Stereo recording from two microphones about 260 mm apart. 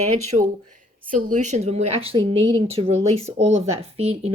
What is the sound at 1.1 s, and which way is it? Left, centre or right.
A woman's voice, right.